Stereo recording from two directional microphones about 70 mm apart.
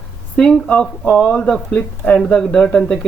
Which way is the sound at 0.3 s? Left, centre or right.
Centre.